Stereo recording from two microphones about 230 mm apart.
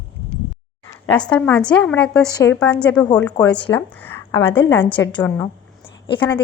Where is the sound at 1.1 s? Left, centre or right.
Centre.